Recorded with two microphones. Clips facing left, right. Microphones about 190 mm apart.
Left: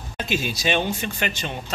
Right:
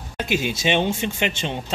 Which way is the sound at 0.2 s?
15° right (ahead or behind).